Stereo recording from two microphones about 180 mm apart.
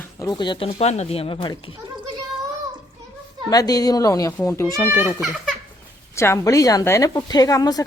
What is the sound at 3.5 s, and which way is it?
A woman's voice, 20° left (ahead or behind).